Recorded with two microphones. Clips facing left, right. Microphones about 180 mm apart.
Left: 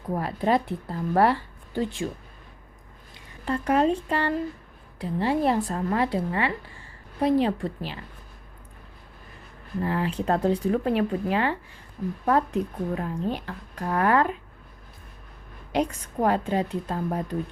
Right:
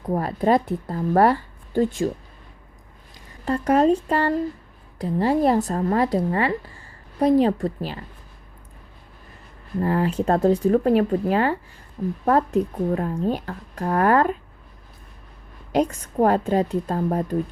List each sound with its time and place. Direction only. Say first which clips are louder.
0.1 s speech: right 4 dB; 45° right (ahead or behind)
3.2 s speech: right 4 dB; 40° right (ahead or behind)
9.8 s speech: right 5 dB; 45° right (ahead or behind)
15.7 s speech: right 4 dB; 45° right (ahead or behind)